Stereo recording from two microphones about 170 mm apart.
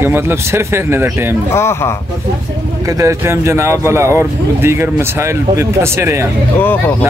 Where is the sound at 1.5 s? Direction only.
15° left (ahead or behind).